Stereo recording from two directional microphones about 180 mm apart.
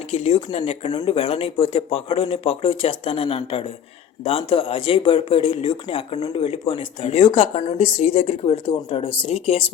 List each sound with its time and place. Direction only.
0.1 s speech: 35° left (ahead or behind)